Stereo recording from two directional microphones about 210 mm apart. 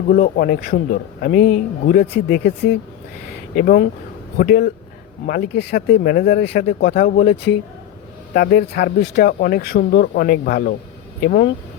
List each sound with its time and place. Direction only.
0.1 s a man's voice: 40° left (ahead or behind)